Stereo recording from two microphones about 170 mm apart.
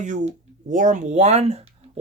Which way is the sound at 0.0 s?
45° right (ahead or behind).